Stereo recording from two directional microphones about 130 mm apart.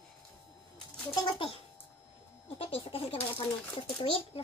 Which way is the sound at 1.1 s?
40° left (ahead or behind).